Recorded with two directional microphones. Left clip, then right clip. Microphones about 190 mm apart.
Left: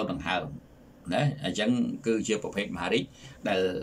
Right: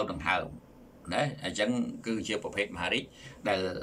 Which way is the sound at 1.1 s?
15° left (ahead or behind).